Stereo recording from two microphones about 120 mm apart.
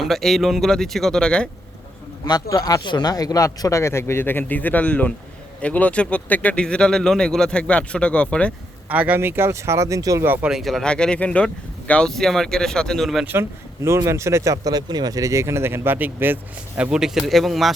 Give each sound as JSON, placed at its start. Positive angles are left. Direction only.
{"t": 0.0, "sound": "speech", "side_deg": 0}
{"t": 2.2, "sound": "speech", "side_deg": 35}
{"t": 8.9, "sound": "speech", "side_deg": -15}
{"t": 10.2, "sound": "speech", "side_deg": -15}
{"t": 10.5, "sound": "speech", "side_deg": 0}
{"t": 13.2, "sound": "speech", "side_deg": -20}